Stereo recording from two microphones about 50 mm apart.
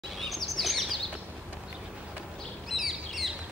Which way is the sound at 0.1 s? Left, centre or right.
Centre.